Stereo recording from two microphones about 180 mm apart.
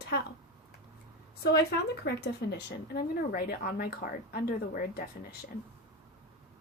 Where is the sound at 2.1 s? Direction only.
60° left (ahead or behind).